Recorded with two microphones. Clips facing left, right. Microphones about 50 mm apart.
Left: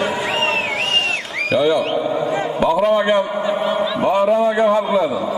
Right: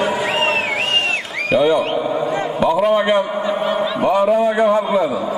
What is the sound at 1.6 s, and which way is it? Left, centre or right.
Speech, centre.